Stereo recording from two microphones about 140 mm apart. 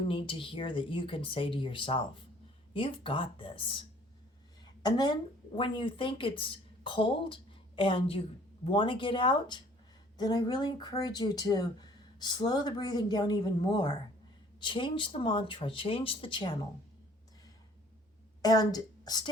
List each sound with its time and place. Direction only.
0.1 s speech: 40° left (ahead or behind)
18.4 s a woman's voice: 25° left (ahead or behind)